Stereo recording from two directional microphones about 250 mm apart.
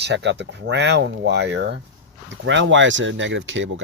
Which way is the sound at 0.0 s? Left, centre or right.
Right.